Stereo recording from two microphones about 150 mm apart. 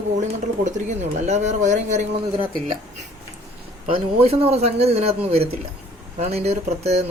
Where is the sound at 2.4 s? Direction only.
35° right (ahead or behind).